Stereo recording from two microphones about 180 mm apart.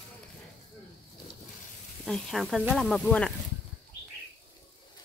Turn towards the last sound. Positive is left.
turn(degrees=5)  # may be behind; listen again after turning